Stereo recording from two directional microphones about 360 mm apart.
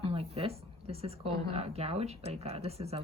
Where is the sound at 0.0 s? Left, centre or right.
Centre.